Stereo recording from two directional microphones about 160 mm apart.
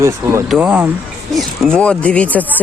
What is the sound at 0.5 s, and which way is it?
Speech, 5° right (ahead or behind).